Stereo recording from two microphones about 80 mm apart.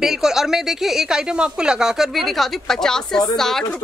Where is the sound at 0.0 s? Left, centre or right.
Centre.